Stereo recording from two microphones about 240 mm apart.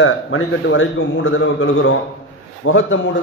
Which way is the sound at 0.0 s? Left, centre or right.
Left.